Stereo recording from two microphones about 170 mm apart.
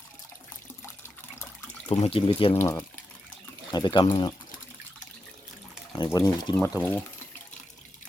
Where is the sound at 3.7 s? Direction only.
25° left (ahead or behind).